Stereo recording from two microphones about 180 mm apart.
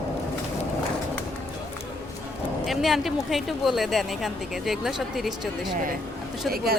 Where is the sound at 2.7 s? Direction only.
Centre (ahead or behind).